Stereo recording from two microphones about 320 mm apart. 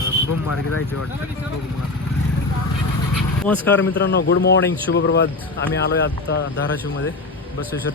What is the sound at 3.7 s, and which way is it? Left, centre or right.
A man's voice, left.